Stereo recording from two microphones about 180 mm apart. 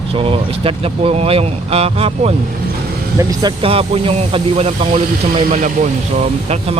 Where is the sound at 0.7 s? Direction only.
30° right (ahead or behind).